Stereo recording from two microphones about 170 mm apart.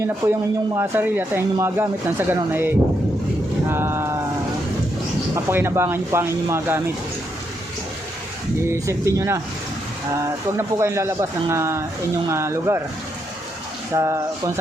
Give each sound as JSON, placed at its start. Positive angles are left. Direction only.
{"t": 0.0, "sound": "speech", "side_deg": -15}
{"t": 5.3, "sound": "speech", "side_deg": -15}
{"t": 8.5, "sound": "speech", "side_deg": -15}
{"t": 13.9, "sound": "speech", "side_deg": -20}